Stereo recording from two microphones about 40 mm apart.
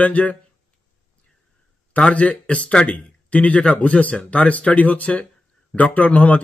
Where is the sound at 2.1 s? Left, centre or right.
Left.